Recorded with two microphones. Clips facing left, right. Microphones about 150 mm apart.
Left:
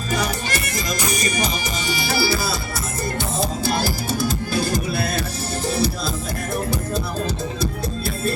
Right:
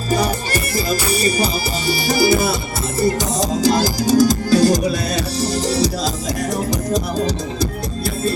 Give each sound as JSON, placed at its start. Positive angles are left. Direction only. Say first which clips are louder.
{"t": 0.1, "sound": "music", "louder": "right 5 dB", "side_deg": -35}
{"t": 2.2, "sound": "music", "louder": "right 9 dB", "side_deg": -20}
{"t": 3.6, "sound": "music", "louder": "right 6 dB", "side_deg": -90}